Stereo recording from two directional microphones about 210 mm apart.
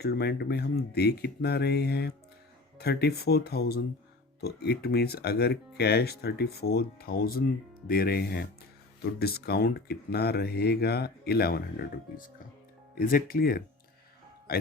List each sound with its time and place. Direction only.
0.0 s speech: 50° left (ahead or behind)
13.0 s speech: 40° left (ahead or behind)